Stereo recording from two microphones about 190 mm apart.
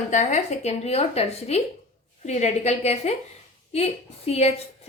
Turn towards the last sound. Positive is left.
turn(degrees=35)  # may be behind; listen again after turning